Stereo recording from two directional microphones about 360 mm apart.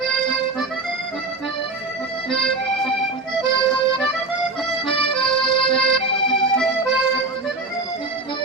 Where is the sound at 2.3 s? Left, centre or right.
Centre.